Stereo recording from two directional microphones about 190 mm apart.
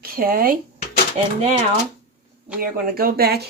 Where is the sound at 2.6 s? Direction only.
50° right (ahead or behind).